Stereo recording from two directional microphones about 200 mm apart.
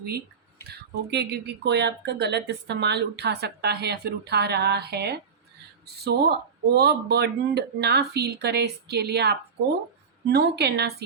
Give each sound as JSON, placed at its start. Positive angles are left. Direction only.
{"t": 1.1, "sound": "a woman's voice", "side_deg": -55}